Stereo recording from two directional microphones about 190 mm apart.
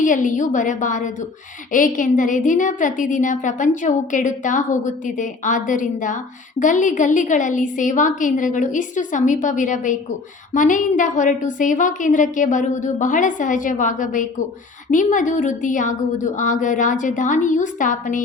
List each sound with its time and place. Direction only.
0.0 s a woman's voice: 40° left (ahead or behind)